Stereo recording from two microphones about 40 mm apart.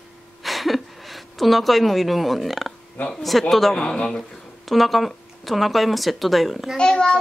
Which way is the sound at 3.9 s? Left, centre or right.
Left.